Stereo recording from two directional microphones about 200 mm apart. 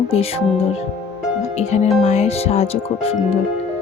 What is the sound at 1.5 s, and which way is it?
Speech, 35° left (ahead or behind).